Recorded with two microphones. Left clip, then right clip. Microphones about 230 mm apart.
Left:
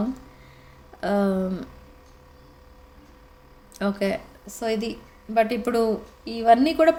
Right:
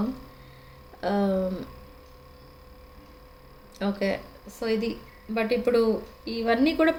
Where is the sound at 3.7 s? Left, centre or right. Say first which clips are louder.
Left 2 dB; left.